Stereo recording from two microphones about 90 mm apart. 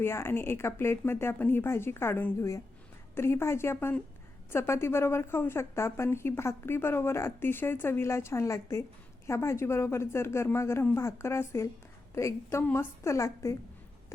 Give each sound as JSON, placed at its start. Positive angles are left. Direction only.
{"t": 0.0, "sound": "a woman's voice", "side_deg": 30}